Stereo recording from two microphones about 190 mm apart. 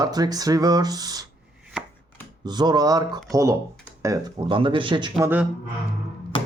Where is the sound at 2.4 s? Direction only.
20° right (ahead or behind).